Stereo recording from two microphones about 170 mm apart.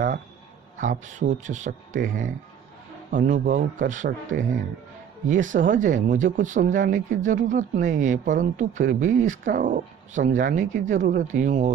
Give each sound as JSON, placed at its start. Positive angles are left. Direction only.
{"t": 0.7, "sound": "speech", "side_deg": -45}